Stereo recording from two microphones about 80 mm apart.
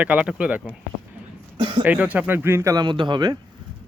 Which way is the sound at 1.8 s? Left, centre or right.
Centre.